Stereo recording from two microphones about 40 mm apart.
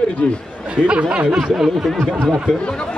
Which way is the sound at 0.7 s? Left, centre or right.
Right.